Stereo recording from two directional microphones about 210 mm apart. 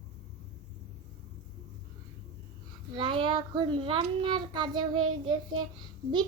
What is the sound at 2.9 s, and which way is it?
A child's voice, 20° right (ahead or behind).